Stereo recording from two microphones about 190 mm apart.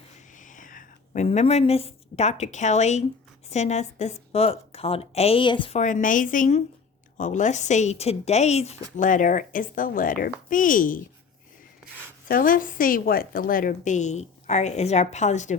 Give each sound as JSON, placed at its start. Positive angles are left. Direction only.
{"t": 0.3, "sound": "a woman's voice", "side_deg": 45}
{"t": 5.8, "sound": "a woman's voice", "side_deg": 45}
{"t": 12.3, "sound": "a woman's voice", "side_deg": 45}